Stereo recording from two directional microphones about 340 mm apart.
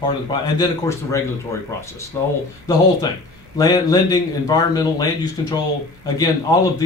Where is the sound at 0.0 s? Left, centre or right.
Centre.